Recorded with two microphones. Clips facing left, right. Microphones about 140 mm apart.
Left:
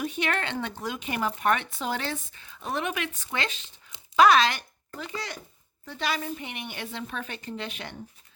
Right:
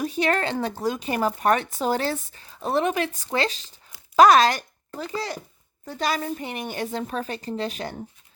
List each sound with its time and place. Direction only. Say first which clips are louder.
0.0 s speech: right 6 dB; 35° right (ahead or behind)